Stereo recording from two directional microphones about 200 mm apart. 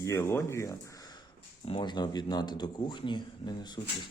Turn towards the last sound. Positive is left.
turn(degrees=20)  # may be behind; listen again after turning